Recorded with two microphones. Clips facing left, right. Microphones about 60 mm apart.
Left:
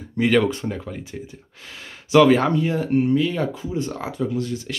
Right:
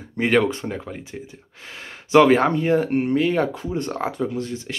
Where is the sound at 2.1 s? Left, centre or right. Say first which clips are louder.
Even; right.